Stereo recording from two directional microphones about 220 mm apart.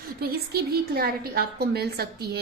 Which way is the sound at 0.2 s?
45° right (ahead or behind).